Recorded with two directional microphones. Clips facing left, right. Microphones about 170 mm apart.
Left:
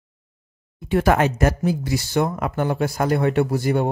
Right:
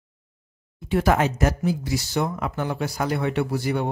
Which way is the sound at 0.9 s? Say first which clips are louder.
Left 3 dB; 60° left (ahead or behind).